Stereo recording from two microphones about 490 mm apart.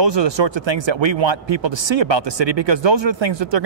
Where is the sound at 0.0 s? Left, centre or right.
Right.